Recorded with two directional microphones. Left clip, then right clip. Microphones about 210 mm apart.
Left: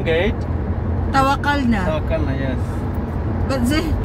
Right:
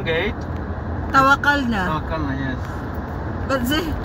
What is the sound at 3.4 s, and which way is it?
Speech, 20° right (ahead or behind).